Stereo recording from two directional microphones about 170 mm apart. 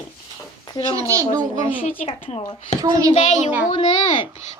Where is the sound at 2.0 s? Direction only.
40° left (ahead or behind).